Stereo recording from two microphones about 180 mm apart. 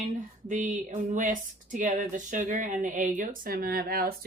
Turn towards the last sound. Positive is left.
turn(degrees=-55)  # may be behind; listen again after turning